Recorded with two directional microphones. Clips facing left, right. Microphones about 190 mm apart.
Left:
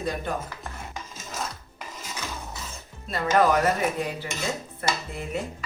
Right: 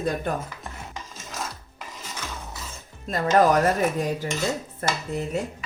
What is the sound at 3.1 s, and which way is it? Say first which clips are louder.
Speech: right 2 dB; 40° right (ahead or behind).